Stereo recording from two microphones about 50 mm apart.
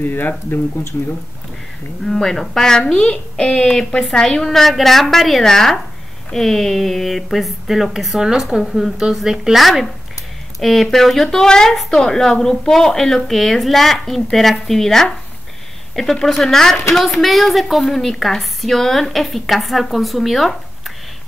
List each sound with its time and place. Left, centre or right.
0.0 s speech: left
2.0 s a woman's voice: centre